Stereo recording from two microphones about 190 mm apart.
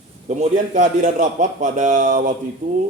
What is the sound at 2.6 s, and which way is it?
Stir, 40° right (ahead or behind).